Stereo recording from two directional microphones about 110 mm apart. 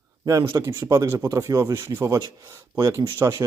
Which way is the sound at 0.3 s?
30° right (ahead or behind).